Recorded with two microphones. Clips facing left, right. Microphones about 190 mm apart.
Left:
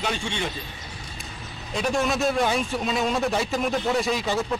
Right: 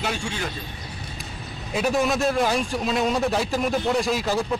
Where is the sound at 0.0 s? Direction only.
5° right (ahead or behind).